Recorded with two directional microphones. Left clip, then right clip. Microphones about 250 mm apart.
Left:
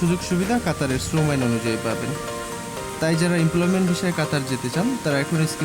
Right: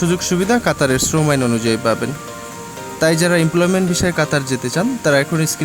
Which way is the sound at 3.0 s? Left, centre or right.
Centre.